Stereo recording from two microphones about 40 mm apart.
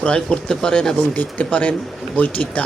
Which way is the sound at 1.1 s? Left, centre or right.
Left.